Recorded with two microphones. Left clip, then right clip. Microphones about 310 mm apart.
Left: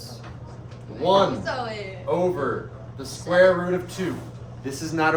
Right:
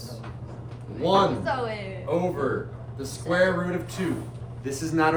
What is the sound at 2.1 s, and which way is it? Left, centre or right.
Speech, centre.